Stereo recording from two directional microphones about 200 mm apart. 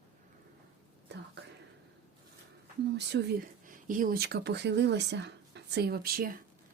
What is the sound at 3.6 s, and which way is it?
Speech, 40° right (ahead or behind).